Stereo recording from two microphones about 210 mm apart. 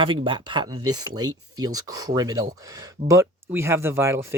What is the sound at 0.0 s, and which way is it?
Speech, 25° right (ahead or behind).